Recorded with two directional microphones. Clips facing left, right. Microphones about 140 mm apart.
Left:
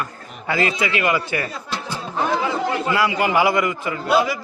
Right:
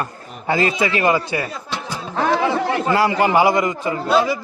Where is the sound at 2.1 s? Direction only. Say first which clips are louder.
Right 4 dB; 70° right (ahead or behind).